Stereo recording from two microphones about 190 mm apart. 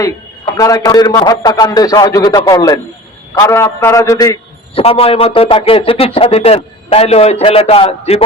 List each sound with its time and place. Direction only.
0.5 s a man's voice: 20° left (ahead or behind)
4.7 s speech: 30° left (ahead or behind)